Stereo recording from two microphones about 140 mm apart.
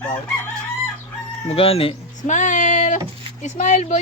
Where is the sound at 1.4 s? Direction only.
45° left (ahead or behind).